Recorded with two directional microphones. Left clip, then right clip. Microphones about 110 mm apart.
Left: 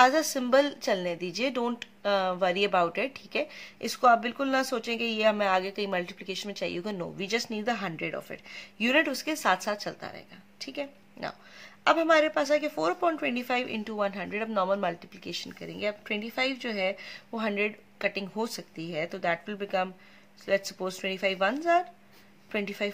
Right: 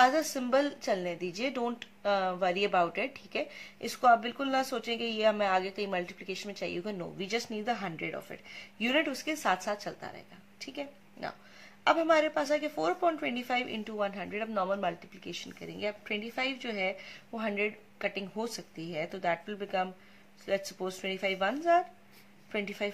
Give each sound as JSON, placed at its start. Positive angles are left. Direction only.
{"t": 0.0, "sound": "a woman's voice", "side_deg": 40}